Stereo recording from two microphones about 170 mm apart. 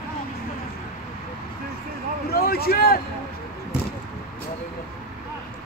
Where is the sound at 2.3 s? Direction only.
65° left (ahead or behind).